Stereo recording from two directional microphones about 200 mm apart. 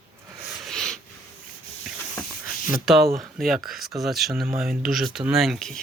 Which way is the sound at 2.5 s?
Centre (ahead or behind).